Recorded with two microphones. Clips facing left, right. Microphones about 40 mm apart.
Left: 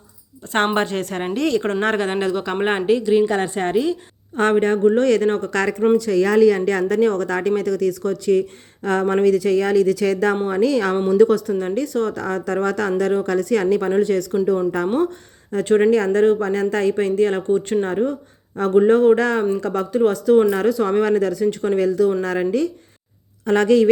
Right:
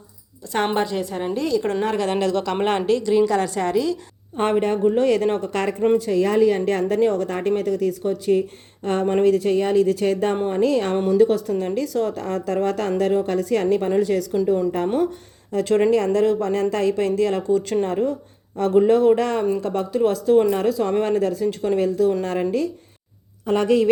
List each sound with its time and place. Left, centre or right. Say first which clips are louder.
0.5 s a woman's voice: left 2 dB; left
2.0 s a woman's voice: even; left
3.3 s a woman's voice: left 1 dB; left
4.4 s speech: left 3 dB; left
4.9 s speech: left 2 dB; left
10.5 s speech: left 2 dB; left
10.9 s a woman's voice: left 1 dB; left
11.2 s speech: left 4 dB; left
11.5 s speech: left 1 dB; left
15.5 s a woman's voice: left 2 dB; left